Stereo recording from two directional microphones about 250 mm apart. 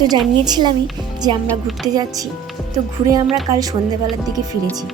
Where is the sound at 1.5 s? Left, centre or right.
Centre.